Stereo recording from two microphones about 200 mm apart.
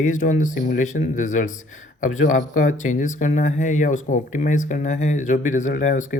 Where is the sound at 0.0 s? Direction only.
40° left (ahead or behind).